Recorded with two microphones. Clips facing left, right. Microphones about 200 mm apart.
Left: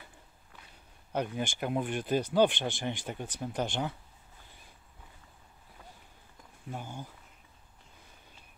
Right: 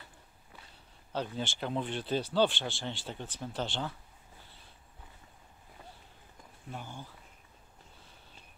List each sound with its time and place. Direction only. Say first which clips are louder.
1.1 s speech: left 3 dB; 15° left (ahead or behind)
6.7 s speech: left 3 dB; 15° left (ahead or behind)